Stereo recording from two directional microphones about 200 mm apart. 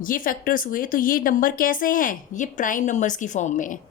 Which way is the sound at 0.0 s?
45° left (ahead or behind).